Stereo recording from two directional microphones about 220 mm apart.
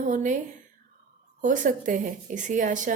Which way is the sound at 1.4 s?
35° right (ahead or behind).